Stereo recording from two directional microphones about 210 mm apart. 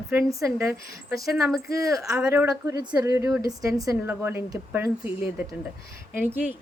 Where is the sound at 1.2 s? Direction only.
Centre (ahead or behind).